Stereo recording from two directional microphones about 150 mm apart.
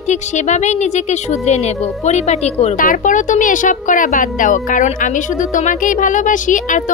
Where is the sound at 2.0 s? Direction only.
45° left (ahead or behind).